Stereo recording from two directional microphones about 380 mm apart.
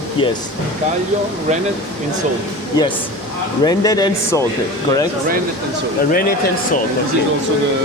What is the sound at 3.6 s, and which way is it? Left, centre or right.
Speech, centre.